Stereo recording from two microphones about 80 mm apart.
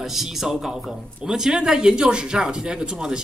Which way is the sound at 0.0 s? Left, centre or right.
Centre.